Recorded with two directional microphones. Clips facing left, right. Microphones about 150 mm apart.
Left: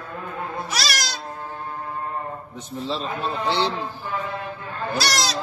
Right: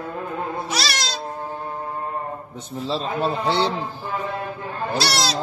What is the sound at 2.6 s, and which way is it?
Speech, 35° right (ahead or behind).